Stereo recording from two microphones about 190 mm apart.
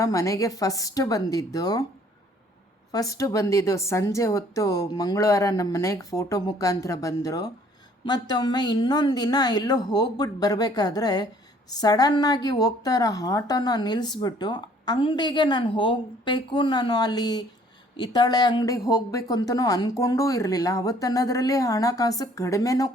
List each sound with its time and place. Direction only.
0.0 s speech: 15° left (ahead or behind)
2.9 s a woman's voice: 15° left (ahead or behind)